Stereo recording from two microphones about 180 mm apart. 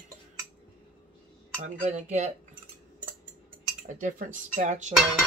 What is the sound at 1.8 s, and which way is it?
Speech, 40° right (ahead or behind).